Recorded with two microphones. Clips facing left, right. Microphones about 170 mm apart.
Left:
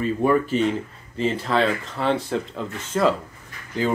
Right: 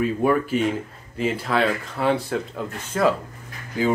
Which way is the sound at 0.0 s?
5° right (ahead or behind).